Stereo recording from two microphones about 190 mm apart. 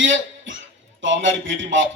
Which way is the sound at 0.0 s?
80° right.